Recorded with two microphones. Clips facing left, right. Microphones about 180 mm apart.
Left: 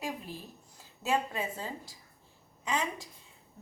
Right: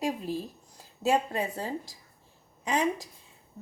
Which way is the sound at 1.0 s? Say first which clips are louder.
Right 5 dB; 40° right (ahead or behind).